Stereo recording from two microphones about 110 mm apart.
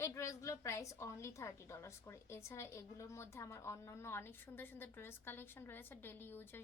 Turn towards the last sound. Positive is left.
turn(degrees=20)  # may be behind; listen again after turning